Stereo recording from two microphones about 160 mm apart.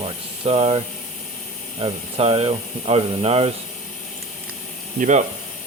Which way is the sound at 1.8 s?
35° right (ahead or behind).